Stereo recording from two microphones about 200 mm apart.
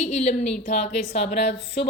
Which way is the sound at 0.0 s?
35° left (ahead or behind).